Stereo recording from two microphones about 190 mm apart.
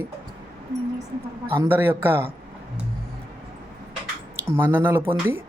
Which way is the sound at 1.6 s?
10° right (ahead or behind).